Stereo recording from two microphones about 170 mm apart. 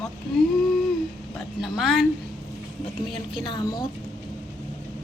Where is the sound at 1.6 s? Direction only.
Centre (ahead or behind).